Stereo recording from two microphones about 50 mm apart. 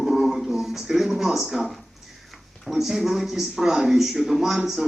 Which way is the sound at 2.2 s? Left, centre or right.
Centre.